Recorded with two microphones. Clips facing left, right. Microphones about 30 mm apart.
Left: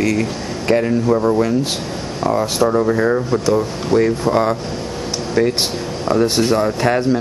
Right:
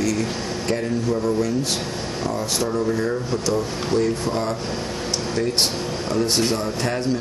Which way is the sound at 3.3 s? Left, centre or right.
Centre.